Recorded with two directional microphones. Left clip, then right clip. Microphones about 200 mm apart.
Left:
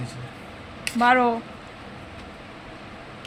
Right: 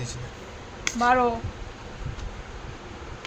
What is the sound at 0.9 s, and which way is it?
Speech, 30° left (ahead or behind).